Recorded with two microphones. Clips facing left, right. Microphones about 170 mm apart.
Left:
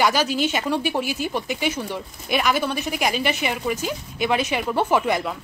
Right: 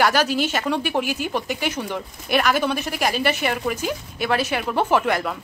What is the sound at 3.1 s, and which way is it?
Speech, 50° right (ahead or behind).